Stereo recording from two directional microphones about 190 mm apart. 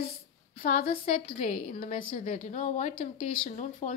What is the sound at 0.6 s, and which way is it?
Speech, 50° left (ahead or behind).